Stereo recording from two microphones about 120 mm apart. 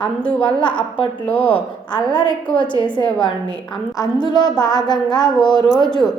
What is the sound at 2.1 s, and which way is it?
Speech, 40° left (ahead or behind).